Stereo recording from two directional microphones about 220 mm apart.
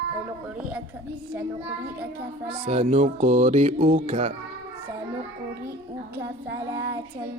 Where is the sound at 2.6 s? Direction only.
25° right (ahead or behind).